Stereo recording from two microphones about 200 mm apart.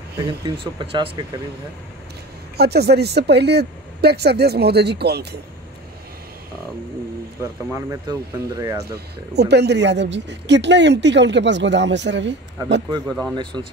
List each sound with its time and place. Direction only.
0.2 s speech: 25° right (ahead or behind)
2.5 s speech: 55° right (ahead or behind)
7.7 s speech: 15° right (ahead or behind)
8.8 s speech: 55° right (ahead or behind)
13.4 s speech: 25° right (ahead or behind)